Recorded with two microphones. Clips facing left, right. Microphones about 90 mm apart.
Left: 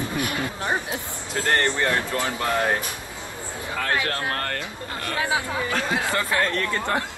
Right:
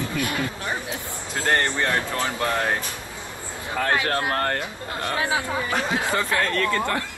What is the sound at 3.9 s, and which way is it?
Speech, 20° right (ahead or behind).